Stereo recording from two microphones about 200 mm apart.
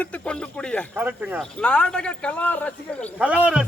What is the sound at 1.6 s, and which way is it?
Speech, 5° left (ahead or behind).